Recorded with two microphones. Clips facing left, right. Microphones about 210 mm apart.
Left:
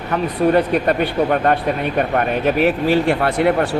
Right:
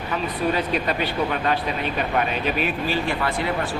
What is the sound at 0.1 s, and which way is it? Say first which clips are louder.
Speech: left 8 dB; 60° left (ahead or behind).